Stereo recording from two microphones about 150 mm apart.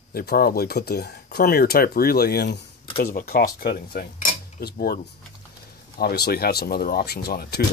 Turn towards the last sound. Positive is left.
turn(degrees=90)